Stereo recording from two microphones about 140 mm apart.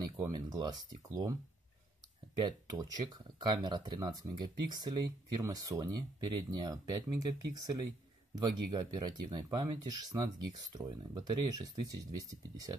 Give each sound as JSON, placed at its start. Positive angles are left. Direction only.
{"t": 0.0, "sound": "speech", "side_deg": -30}
{"t": 2.3, "sound": "speech", "side_deg": -30}